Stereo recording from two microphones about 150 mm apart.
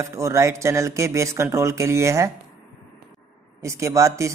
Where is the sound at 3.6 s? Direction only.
20° right (ahead or behind).